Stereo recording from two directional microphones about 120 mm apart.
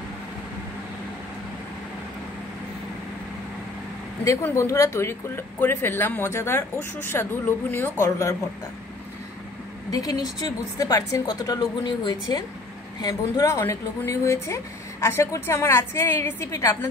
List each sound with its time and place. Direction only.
4.2 s speech: 25° left (ahead or behind)
9.8 s a woman's voice: 30° left (ahead or behind)
13.0 s speech: 25° left (ahead or behind)